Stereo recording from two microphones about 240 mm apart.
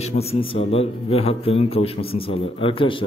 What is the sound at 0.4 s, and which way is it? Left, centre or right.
A man's voice, left.